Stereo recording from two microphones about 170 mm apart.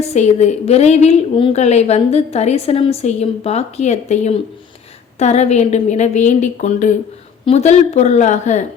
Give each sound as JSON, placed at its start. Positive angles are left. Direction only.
{"t": 0.0, "sound": "a woman's voice", "side_deg": 40}